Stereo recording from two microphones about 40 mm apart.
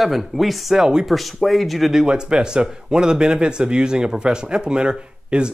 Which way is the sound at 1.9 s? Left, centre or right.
Centre.